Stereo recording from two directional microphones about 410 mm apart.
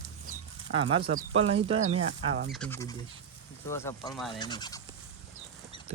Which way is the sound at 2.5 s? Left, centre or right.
Centre.